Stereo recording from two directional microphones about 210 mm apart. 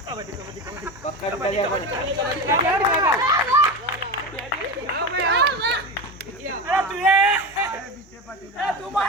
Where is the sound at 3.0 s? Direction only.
15° right (ahead or behind).